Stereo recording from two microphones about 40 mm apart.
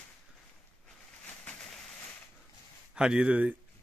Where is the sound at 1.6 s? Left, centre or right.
Centre.